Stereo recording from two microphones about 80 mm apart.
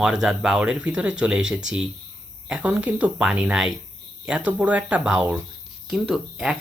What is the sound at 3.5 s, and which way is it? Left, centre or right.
Speech, centre.